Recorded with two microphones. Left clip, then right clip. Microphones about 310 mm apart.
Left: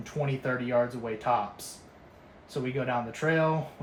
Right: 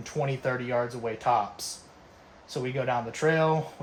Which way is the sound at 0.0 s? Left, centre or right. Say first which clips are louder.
Right 3 dB; right.